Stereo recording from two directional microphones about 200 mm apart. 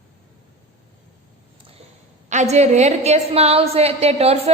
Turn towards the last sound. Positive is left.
turn(degrees=-30)  # may be behind; listen again after turning